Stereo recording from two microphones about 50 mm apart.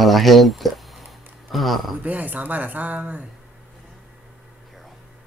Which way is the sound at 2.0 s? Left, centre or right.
Right.